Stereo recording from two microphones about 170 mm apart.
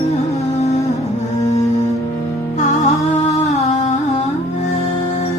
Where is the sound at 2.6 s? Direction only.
40° left (ahead or behind).